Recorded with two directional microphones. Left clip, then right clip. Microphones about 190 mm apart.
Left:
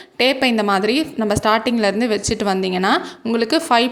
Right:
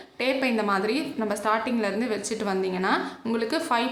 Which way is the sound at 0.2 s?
40° left (ahead or behind).